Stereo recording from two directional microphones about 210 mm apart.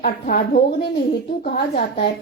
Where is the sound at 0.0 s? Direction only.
40° left (ahead or behind).